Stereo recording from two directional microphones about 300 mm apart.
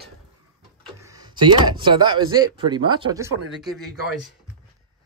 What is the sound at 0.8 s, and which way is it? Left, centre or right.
Speech, centre.